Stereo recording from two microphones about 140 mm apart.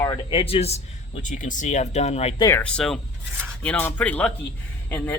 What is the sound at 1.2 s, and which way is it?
Speech, 65° left (ahead or behind).